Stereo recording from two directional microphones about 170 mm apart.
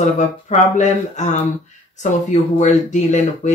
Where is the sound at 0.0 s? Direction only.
45° left (ahead or behind).